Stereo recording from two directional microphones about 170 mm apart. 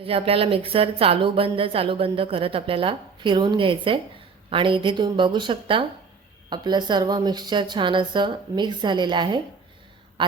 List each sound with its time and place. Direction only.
0.0 s a woman's voice: 35° right (ahead or behind)